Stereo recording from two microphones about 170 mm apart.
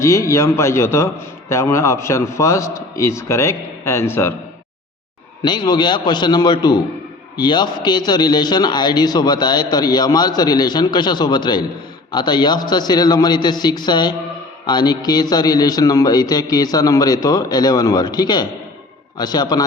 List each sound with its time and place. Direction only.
0.0 s a man's voice: 15° left (ahead or behind)
5.4 s a man's voice: 25° left (ahead or behind)